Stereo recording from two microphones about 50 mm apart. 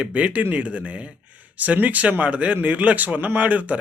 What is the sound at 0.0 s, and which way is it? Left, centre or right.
A man's voice, right.